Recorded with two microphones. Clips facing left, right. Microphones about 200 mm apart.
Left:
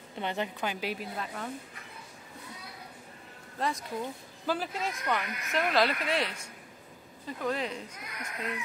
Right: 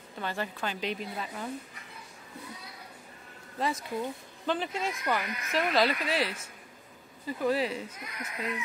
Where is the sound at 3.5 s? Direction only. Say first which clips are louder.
Right 1 dB; 5° right (ahead or behind).